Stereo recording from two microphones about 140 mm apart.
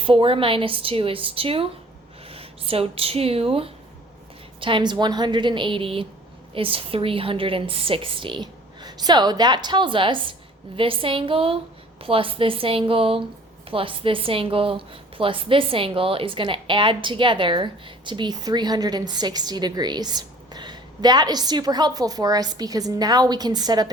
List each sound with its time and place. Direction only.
0.0 s a woman's voice: 40° right (ahead or behind)